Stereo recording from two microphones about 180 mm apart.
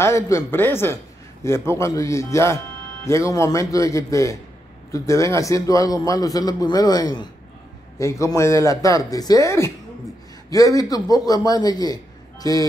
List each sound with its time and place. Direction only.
0.0 s a man's voice: 15° left (ahead or behind)